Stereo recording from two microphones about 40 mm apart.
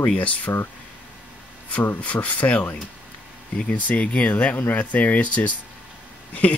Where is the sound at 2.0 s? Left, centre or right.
Left.